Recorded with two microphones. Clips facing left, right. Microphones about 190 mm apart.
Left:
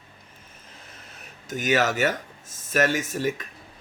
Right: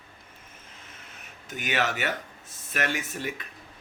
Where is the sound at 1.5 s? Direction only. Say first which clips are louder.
Left 6 dB; 40° left (ahead or behind).